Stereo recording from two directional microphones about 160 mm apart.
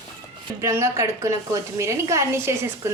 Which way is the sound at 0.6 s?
20° right (ahead or behind).